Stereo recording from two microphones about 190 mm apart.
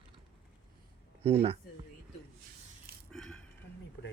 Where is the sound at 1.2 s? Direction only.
30° right (ahead or behind).